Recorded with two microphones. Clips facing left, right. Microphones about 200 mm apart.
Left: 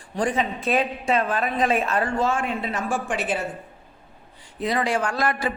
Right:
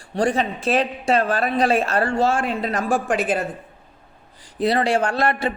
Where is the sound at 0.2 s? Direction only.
75° right (ahead or behind).